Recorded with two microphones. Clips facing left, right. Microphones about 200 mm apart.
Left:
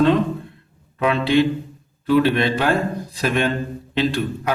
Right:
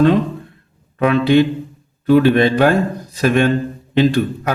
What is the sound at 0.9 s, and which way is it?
A man's voice, 50° right (ahead or behind).